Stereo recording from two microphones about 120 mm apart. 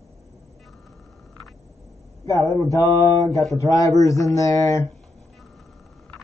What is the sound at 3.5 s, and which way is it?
Speech, 30° left (ahead or behind).